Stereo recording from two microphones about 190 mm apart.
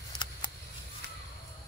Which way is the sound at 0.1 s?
25° left (ahead or behind).